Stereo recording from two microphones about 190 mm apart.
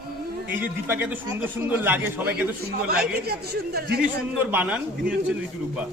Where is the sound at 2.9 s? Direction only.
55° right (ahead or behind).